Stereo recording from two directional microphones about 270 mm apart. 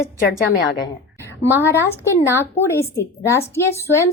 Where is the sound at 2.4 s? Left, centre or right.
Centre.